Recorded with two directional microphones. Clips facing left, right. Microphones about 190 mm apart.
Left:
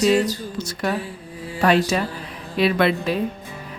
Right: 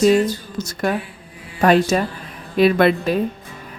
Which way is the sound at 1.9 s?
45° right (ahead or behind).